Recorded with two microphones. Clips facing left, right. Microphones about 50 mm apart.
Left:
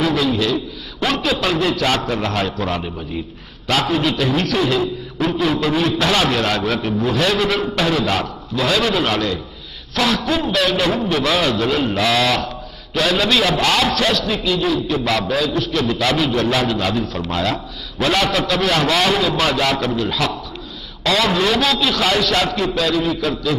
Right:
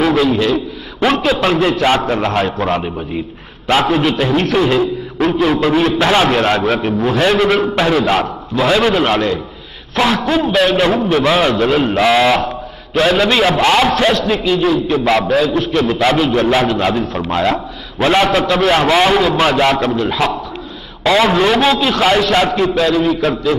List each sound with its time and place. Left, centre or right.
0.0 s a man's voice: right